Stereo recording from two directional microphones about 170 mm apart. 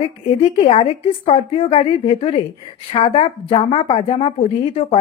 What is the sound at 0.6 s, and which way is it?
A woman's voice, 35° left (ahead or behind).